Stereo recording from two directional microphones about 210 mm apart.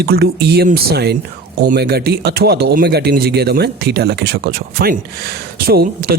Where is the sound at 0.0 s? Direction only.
50° right (ahead or behind).